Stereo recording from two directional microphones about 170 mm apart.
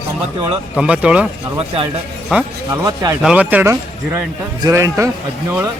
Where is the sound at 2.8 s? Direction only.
20° right (ahead or behind).